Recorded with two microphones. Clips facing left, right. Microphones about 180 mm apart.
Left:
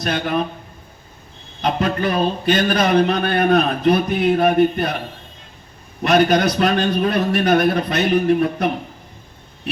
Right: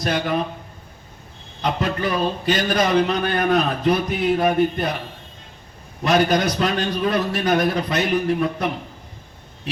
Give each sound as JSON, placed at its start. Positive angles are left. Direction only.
{"t": 0.0, "sound": "speech", "side_deg": 65}
{"t": 1.6, "sound": "speech", "side_deg": 60}
{"t": 6.1, "sound": "speech", "side_deg": 60}